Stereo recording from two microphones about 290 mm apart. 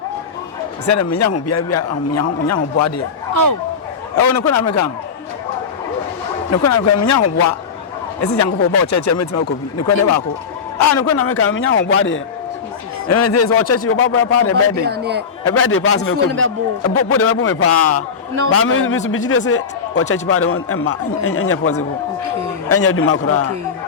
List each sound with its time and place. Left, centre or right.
0.9 s a man's voice: left
4.1 s a man's voice: left
6.5 s a man's voice: left
8.2 s speech: left
10.9 s a man's voice: left
13.1 s a man's voice: left
14.8 s a man's voice: right
15.4 s a man's voice: left